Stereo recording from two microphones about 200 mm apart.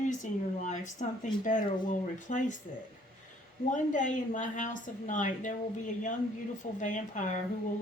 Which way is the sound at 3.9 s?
40° left (ahead or behind).